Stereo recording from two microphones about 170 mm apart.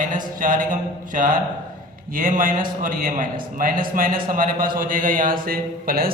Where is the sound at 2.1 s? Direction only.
50° right (ahead or behind).